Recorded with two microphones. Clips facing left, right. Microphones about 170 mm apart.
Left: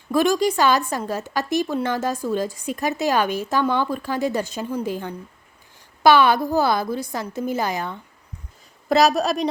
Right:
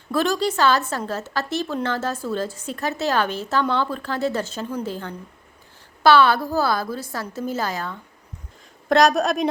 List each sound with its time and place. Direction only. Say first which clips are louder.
0.1 s a woman's voice: left 3 dB; 15° left (ahead or behind)
8.9 s a woman's voice: even; 5° left (ahead or behind)